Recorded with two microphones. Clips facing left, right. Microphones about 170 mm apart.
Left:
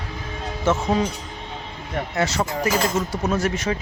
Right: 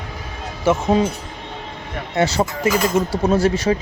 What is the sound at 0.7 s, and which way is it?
Speech, 10° right (ahead or behind).